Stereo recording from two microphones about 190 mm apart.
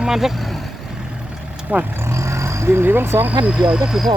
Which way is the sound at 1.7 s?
15° right (ahead or behind).